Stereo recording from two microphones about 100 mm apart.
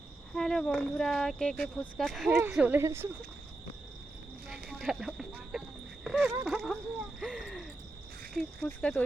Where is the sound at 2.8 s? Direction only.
25° right (ahead or behind).